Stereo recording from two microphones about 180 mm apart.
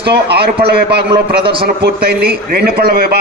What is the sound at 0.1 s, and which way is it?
A man's voice, 65° right (ahead or behind).